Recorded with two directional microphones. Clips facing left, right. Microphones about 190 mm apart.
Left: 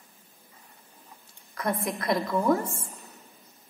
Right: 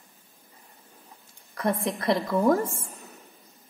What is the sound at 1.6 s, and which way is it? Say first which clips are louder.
Speech: right 2 dB; 30° right (ahead or behind).